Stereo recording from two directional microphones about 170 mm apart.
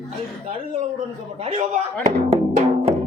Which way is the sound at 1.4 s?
35° right (ahead or behind).